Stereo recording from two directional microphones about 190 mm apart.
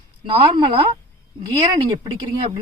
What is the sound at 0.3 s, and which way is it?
Speech, 25° right (ahead or behind).